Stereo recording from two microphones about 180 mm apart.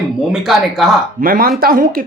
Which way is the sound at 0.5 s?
Centre (ahead or behind).